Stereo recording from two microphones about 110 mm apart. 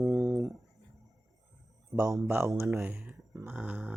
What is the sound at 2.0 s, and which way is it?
Speech, 25° right (ahead or behind).